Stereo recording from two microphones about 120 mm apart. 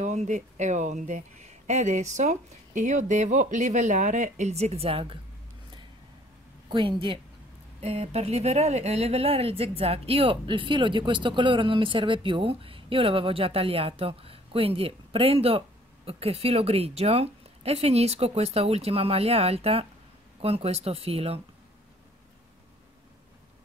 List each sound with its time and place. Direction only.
0.0 s speech: 80° right; by 5.2 s 50° right (ahead or behind)
6.7 s speech: 45° right (ahead or behind)
7.8 s speech: 60° right (ahead or behind)